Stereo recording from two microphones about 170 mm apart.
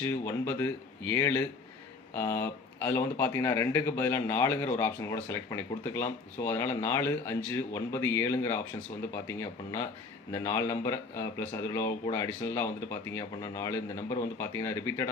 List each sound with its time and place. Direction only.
0.0 s speech: 15° left (ahead or behind)